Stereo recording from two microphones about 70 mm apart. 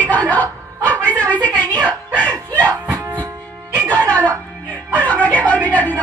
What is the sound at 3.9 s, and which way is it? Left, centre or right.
Music, left.